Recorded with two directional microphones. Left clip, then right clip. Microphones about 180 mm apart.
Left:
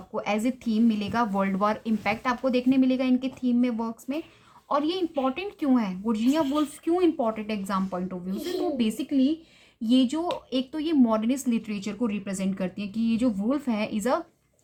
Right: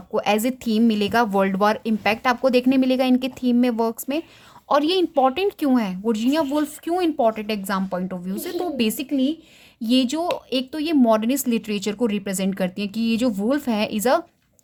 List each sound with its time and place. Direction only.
0.1 s a woman's voice: 40° right (ahead or behind)